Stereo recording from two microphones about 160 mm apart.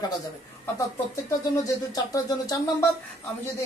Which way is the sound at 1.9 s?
25° left (ahead or behind).